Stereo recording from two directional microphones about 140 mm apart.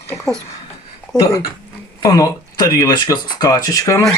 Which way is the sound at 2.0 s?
25° left (ahead or behind).